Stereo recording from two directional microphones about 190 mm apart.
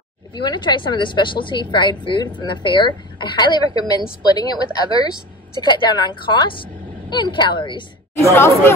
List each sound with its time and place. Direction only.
0.4 s a woman's voice: 25° left (ahead or behind)
5.6 s a woman's voice: 20° left (ahead or behind)
8.2 s speech: 15° left (ahead or behind)